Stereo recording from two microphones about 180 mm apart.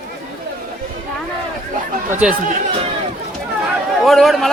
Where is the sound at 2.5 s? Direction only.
35° right (ahead or behind).